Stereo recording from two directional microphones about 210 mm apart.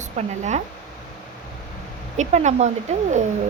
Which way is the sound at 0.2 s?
35° right (ahead or behind).